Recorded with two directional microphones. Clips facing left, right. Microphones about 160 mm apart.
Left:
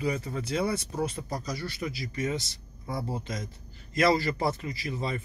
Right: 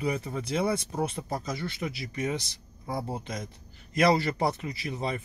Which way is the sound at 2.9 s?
20° right (ahead or behind).